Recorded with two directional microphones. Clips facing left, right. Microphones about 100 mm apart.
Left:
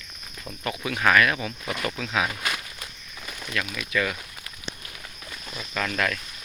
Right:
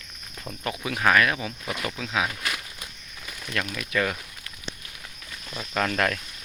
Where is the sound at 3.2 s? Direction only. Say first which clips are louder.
Left 2 dB; 10° left (ahead or behind).